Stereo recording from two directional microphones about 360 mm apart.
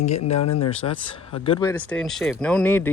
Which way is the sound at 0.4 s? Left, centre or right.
Left.